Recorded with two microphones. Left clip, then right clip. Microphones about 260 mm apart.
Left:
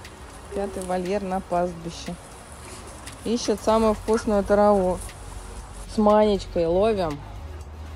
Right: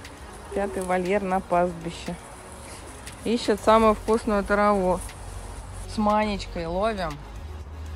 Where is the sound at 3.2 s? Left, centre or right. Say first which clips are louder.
Right 1 dB; centre.